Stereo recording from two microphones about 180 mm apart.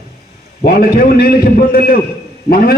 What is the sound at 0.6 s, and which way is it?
A man's voice, 55° left (ahead or behind).